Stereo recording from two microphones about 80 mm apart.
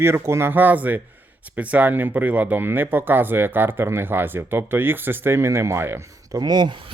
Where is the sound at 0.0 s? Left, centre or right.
Right.